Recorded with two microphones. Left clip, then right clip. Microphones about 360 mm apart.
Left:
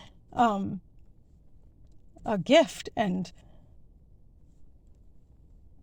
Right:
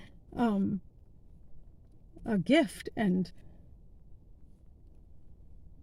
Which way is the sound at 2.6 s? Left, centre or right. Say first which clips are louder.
Left 4 dB; left.